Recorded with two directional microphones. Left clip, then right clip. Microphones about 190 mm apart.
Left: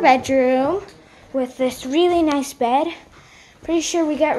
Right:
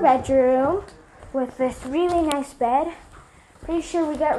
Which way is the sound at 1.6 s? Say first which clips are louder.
Left 5 dB; 35° left (ahead or behind).